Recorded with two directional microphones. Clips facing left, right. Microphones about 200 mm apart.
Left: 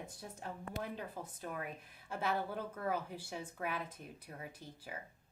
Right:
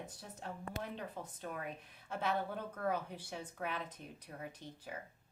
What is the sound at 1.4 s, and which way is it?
A woman's voice, 5° left (ahead or behind).